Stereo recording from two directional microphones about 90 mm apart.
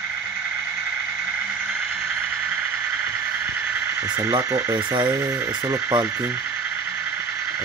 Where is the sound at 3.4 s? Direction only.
25° right (ahead or behind).